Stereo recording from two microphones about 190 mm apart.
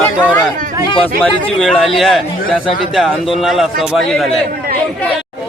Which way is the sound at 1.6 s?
Centre (ahead or behind).